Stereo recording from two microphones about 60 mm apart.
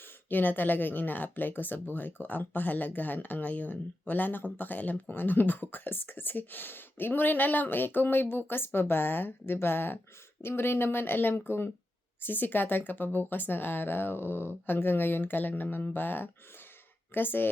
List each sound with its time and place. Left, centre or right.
0.3 s speech: left